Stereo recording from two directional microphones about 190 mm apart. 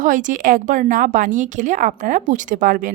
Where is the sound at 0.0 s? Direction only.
40° right (ahead or behind).